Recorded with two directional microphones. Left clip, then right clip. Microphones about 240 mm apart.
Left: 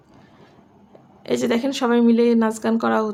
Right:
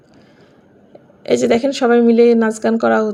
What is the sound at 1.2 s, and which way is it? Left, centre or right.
Speech, centre.